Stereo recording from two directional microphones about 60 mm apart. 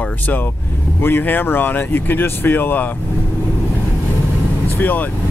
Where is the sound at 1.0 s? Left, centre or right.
Left.